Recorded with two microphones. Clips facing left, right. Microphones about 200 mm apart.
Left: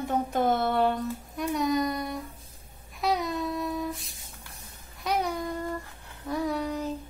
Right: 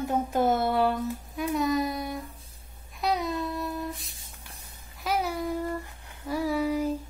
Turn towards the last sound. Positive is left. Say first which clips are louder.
# right 3 dB
turn(degrees=-10)  # may be behind; listen again after turning